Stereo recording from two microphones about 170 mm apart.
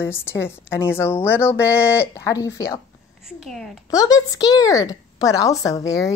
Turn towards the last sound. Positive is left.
turn(degrees=20)  # may be behind; listen again after turning